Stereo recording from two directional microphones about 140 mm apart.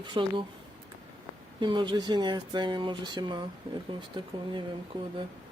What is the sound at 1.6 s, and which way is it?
Speech, 35° right (ahead or behind).